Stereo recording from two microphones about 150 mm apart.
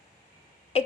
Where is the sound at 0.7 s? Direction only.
40° left (ahead or behind).